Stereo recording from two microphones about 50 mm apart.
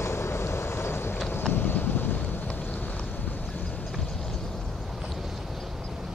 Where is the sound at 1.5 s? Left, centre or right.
Left.